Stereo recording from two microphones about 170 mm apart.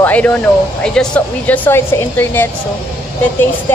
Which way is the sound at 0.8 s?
5° left (ahead or behind).